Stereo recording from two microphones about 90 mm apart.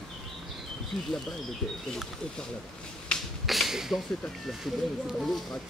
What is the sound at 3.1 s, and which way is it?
Finger snapping, 10° left (ahead or behind).